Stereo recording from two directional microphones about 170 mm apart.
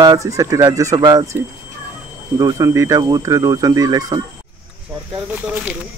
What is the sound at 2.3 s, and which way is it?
Speech, 20° right (ahead or behind).